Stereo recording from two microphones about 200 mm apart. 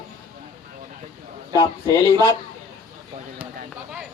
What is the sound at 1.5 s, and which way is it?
Speech, 25° left (ahead or behind).